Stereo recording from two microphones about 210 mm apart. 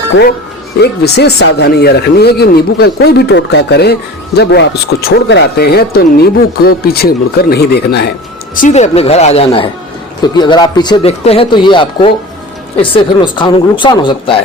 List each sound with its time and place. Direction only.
0.8 s speech: 50° left (ahead or behind)
8.6 s speech: 35° left (ahead or behind)